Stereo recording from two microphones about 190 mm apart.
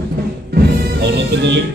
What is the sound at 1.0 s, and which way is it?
Music, 60° right (ahead or behind).